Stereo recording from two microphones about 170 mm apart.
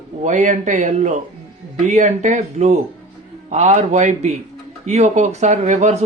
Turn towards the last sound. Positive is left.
turn(degrees=-45)  # may be behind; listen again after turning